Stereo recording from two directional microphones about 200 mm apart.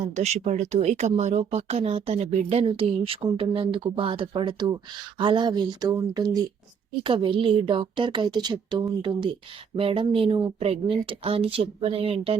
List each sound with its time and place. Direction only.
0.2 s speech: 35° right (ahead or behind)